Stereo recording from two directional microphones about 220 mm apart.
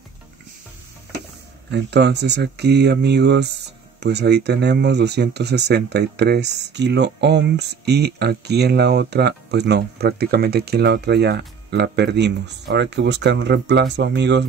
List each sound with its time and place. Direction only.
1.7 s speech: 50° right (ahead or behind)